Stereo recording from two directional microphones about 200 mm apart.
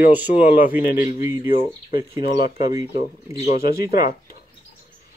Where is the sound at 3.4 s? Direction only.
50° left (ahead or behind).